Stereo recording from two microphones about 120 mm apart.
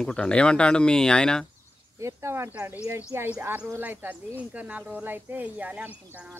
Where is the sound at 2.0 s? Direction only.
25° right (ahead or behind).